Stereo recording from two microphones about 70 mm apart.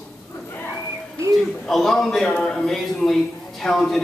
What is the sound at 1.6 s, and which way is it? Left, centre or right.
Speech, centre.